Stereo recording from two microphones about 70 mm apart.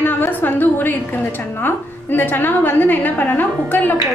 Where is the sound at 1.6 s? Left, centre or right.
Left.